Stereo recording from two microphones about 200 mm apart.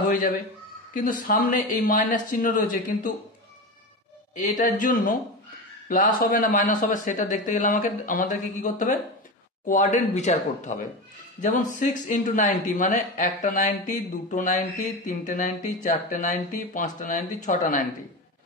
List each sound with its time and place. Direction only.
0.9 s speech: 40° left (ahead or behind)
4.4 s speech: 40° left (ahead or behind)